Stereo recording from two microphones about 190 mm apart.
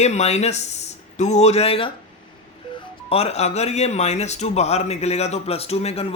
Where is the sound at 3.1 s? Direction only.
35° left (ahead or behind).